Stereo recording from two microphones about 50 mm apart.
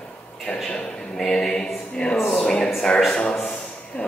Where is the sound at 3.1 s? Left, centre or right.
Left.